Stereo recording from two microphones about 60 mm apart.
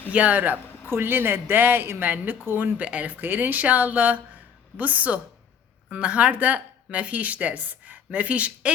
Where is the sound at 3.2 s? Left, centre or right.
Right.